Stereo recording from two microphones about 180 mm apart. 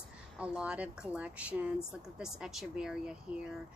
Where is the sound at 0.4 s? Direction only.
5° right (ahead or behind).